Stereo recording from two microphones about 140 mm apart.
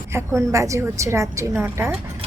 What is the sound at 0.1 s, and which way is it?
A woman's voice, 20° right (ahead or behind).